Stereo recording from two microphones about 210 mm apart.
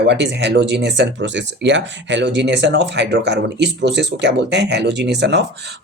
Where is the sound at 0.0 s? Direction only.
55° right (ahead or behind).